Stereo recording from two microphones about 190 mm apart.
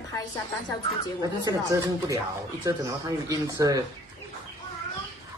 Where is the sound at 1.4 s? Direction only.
20° right (ahead or behind).